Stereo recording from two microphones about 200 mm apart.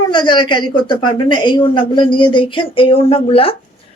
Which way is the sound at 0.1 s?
25° left (ahead or behind).